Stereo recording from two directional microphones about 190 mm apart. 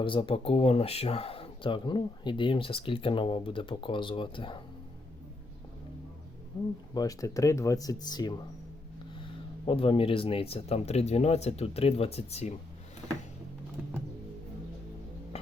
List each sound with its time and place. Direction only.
0.0 s speech: 25° left (ahead or behind)
6.9 s speech: 20° left (ahead or behind)